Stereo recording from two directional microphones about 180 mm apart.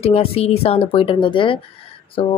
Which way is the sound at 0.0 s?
35° left (ahead or behind).